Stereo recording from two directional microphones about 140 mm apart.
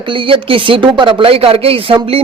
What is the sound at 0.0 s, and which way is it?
Speech, 35° right (ahead or behind).